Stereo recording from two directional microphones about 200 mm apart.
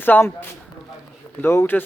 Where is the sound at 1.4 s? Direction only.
10° left (ahead or behind).